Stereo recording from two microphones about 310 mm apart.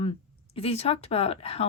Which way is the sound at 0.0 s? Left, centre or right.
Centre.